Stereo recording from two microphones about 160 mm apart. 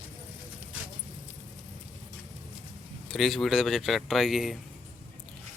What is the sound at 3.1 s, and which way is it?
Speech, centre (ahead or behind).